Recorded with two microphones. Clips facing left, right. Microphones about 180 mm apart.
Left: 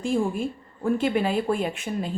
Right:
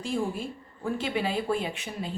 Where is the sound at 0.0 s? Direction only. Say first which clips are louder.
Left 5 dB; 50° left (ahead or behind).